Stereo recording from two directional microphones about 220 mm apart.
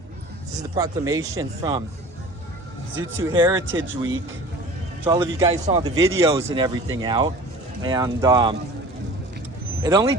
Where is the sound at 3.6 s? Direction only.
60° right (ahead or behind).